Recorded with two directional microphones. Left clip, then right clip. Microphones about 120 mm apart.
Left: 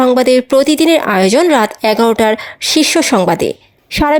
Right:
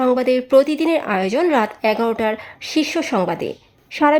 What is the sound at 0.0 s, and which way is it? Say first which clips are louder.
Speech: left 7 dB; 40° left (ahead or behind).